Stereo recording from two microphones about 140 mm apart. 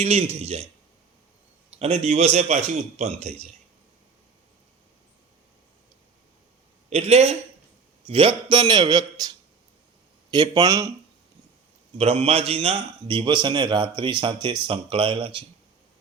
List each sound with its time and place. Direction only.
0.0 s a man's voice: 50° right (ahead or behind)
1.8 s a man's voice: 45° right (ahead or behind)
6.9 s a man's voice: 45° right (ahead or behind); by 9.3 s 30° right (ahead or behind)
10.3 s speech: 30° right (ahead or behind)
11.9 s a man's voice: 45° right (ahead or behind)